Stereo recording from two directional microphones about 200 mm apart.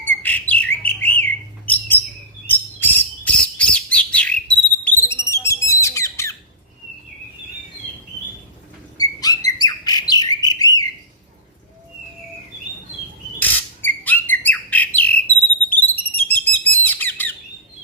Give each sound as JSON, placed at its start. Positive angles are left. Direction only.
{"t": 0.2, "sound": "bird", "side_deg": 10}
{"t": 9.0, "sound": "bird", "side_deg": 20}
{"t": 13.4, "sound": "bird", "side_deg": 10}